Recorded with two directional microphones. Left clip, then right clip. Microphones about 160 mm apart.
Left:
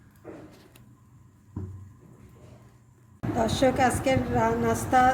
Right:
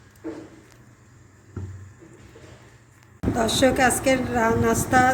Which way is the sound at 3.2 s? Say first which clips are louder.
Right 4 dB; centre (ahead or behind).